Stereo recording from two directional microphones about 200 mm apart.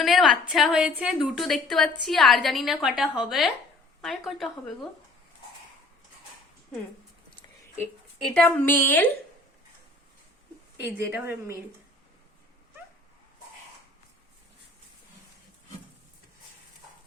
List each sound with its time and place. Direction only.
0.0 s a woman's voice: centre (ahead or behind)
8.2 s a woman's voice: 5° left (ahead or behind)
10.8 s speech: 60° left (ahead or behind)
11.1 s a woman's voice: 10° right (ahead or behind)